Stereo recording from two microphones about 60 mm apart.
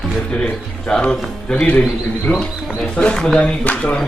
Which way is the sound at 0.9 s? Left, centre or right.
Left.